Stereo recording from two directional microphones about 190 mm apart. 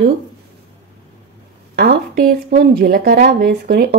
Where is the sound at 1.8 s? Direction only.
55° right (ahead or behind).